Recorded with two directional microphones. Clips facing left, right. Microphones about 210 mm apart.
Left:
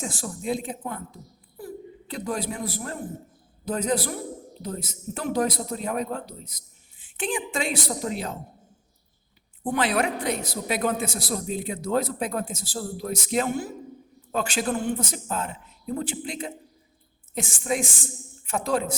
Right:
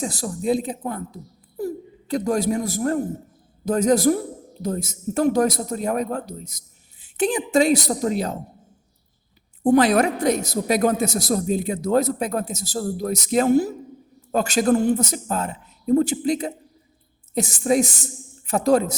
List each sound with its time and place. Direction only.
0.0 s a woman's voice: 35° right (ahead or behind)
9.6 s a woman's voice: 40° right (ahead or behind)